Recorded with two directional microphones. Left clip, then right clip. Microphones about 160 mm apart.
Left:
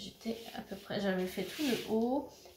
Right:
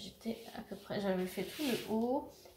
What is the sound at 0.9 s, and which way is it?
Speech, 15° right (ahead or behind).